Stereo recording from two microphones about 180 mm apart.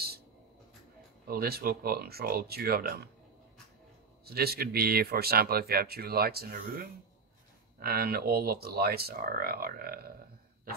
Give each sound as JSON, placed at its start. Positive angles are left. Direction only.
{"t": 1.2, "sound": "speech", "side_deg": -60}
{"t": 4.3, "sound": "speech", "side_deg": -60}